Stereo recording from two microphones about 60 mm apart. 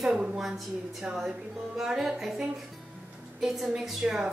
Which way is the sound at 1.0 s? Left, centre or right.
Centre.